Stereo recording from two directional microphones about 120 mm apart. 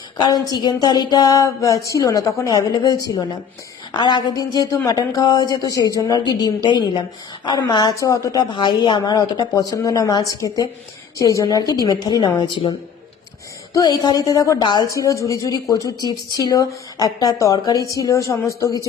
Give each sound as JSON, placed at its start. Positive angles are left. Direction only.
{"t": 0.2, "sound": "speech", "side_deg": 35}
{"t": 13.7, "sound": "speech", "side_deg": 35}